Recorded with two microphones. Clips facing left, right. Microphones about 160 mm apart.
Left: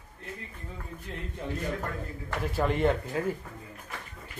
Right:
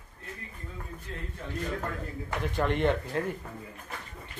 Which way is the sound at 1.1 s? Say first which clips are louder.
Left 2 dB; 20° left (ahead or behind).